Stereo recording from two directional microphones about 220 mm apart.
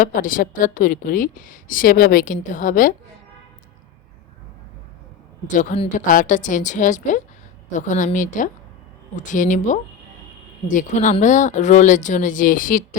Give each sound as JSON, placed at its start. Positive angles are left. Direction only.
{"t": 0.0, "sound": "a woman's voice", "side_deg": 35}
{"t": 5.5, "sound": "a woman's voice", "side_deg": 30}